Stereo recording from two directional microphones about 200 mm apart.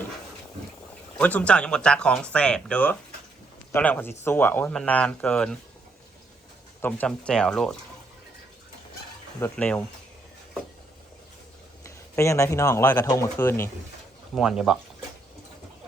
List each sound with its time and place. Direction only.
1.2 s a man's voice: 5° left (ahead or behind)
6.8 s speech: 5° left (ahead or behind)
9.4 s speech: 10° left (ahead or behind)
11.8 s speech: 15° left (ahead or behind)
14.3 s speech: 5° right (ahead or behind)